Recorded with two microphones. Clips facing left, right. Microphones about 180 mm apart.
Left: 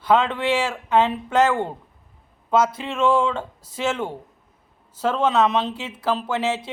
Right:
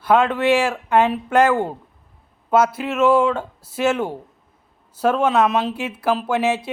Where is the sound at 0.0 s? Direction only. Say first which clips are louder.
Right 3 dB; 10° right (ahead or behind).